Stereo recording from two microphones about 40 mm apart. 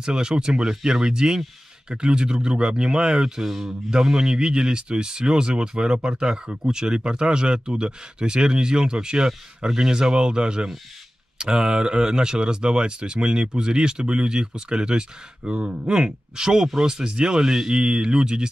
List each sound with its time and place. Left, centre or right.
0.0 s speech: centre
3.4 s speech: centre
3.9 s speech: centre